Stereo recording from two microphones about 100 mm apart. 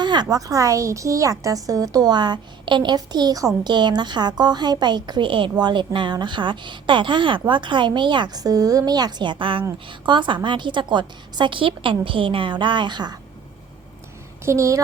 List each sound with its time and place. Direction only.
0.0 s speech: 45° right (ahead or behind)
14.4 s speech: 30° right (ahead or behind)